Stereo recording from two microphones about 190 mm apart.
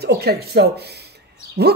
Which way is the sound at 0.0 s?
55° right (ahead or behind).